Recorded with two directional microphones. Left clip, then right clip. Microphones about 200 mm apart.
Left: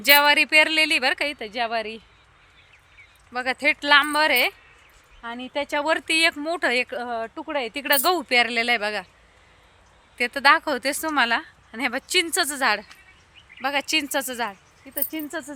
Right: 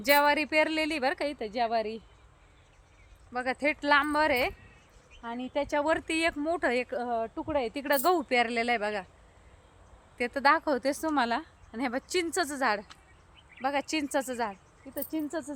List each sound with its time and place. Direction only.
0.0 s speech: 10° left (ahead or behind)
3.3 s speech: 20° left (ahead or behind)
10.2 s a woman's voice: 15° left (ahead or behind)
11.7 s speech: 10° left (ahead or behind)